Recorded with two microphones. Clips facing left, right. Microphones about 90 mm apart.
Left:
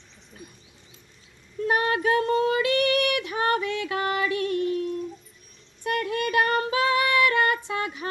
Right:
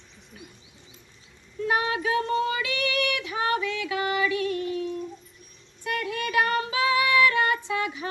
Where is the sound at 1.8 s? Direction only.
50° left (ahead or behind).